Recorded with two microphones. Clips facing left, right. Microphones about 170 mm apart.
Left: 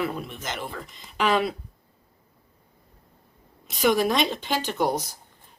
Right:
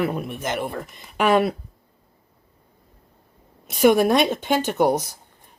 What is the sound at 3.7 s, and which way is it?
Speech, 55° right (ahead or behind).